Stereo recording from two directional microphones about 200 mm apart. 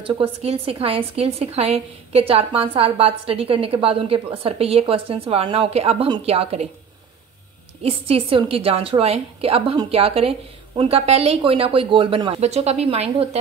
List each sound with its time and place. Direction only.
0.0 s a woman's voice: 30° right (ahead or behind)
7.8 s a woman's voice: 30° right (ahead or behind)